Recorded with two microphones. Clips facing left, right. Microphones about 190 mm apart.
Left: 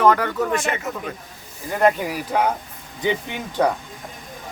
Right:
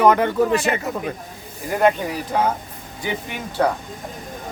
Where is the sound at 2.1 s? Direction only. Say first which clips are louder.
Even; 10° left (ahead or behind).